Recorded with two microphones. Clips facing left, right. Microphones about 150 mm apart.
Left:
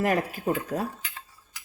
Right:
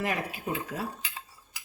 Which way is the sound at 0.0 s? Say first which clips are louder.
Left 6 dB; 45° left (ahead or behind).